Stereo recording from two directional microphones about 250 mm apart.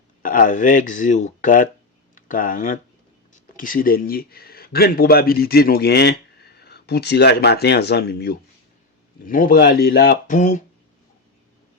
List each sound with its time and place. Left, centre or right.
0.2 s speech: left